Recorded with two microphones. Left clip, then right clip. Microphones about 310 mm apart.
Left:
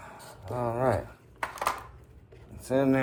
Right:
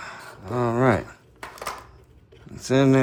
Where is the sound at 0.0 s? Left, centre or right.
Left.